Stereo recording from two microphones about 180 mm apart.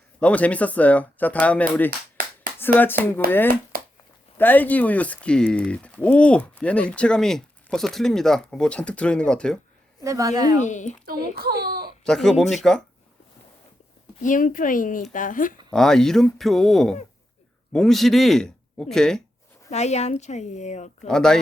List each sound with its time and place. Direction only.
0.2 s speech: 5° left (ahead or behind)
3.7 s a sound: 55° right (ahead or behind)
4.4 s speech: 10° left (ahead or behind)
10.0 s a woman's voice: 15° right (ahead or behind)
10.6 s a woman's voice: 40° left (ahead or behind)
11.0 s a child's voice: 55° right (ahead or behind)
12.0 s speech: 5° left (ahead or behind)
14.2 s speech: 45° left (ahead or behind)
15.7 s speech: 5° left (ahead or behind)
19.7 s a woman's voice: 40° left (ahead or behind)
21.1 s speech: 5° left (ahead or behind)